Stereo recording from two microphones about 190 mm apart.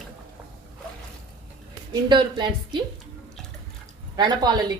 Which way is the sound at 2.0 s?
25° right (ahead or behind).